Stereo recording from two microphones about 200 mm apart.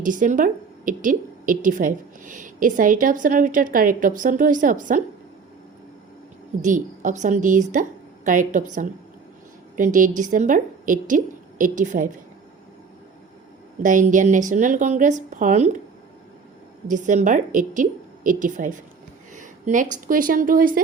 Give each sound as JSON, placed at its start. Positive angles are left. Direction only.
{"t": 0.0, "sound": "a woman's voice", "side_deg": -40}
{"t": 6.6, "sound": "a woman's voice", "side_deg": -40}
{"t": 13.8, "sound": "a woman's voice", "side_deg": -40}
{"t": 16.9, "sound": "a woman's voice", "side_deg": -40}
{"t": 19.3, "sound": "a sound", "side_deg": -40}
{"t": 20.1, "sound": "speech", "side_deg": -45}